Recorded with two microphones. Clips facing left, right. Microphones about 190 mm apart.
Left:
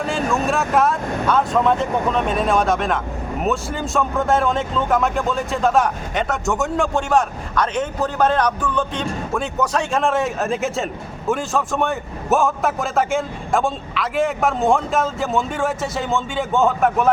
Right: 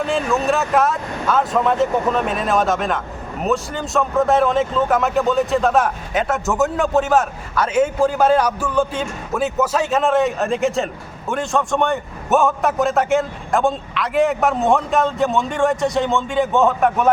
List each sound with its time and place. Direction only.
0.0 s a man's voice: centre (ahead or behind)